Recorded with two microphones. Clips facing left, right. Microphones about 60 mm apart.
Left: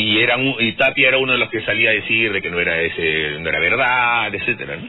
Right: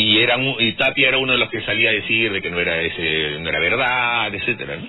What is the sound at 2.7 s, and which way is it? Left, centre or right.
A man's voice, centre.